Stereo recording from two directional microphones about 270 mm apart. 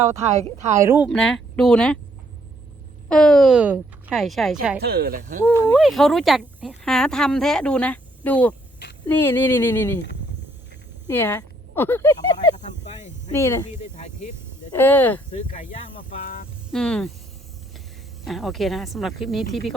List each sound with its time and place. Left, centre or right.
0.2 s speech: right
0.8 s speech: centre
3.1 s speech: centre
4.8 s speech: right
5.7 s speech: centre
11.1 s speech: centre
14.8 s speech: centre
16.0 s speech: left
16.7 s speech: centre
18.3 s speech: centre